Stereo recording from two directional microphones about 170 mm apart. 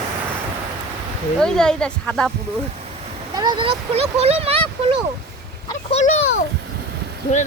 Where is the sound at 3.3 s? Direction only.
25° right (ahead or behind).